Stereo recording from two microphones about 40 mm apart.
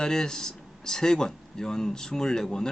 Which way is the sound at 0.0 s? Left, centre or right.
Centre.